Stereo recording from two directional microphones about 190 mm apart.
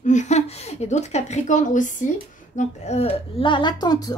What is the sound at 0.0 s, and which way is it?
A woman's voice, 40° left (ahead or behind).